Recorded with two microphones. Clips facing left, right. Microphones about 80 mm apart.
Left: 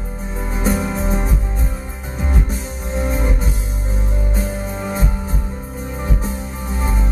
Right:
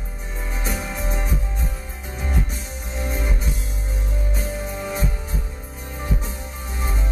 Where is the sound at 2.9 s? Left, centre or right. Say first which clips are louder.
Left 7 dB; left.